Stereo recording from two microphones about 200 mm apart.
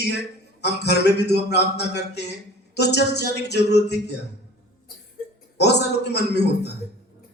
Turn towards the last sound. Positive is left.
turn(degrees=55)  # may be behind; listen again after turning